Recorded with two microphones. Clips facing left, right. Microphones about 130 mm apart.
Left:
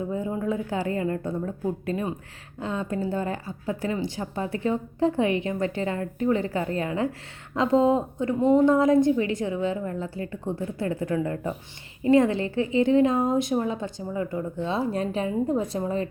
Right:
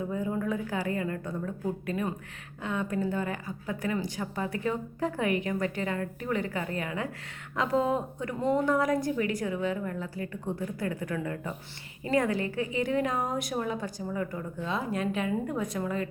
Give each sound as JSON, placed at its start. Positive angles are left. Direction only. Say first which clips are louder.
{"t": 0.1, "sound": "speech", "louder": "left 3 dB", "side_deg": 25}